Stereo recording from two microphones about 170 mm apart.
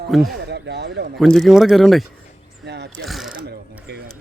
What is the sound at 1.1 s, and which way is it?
Speech, centre (ahead or behind).